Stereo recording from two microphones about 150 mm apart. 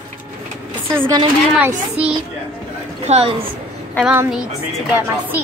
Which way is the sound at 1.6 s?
10° right (ahead or behind).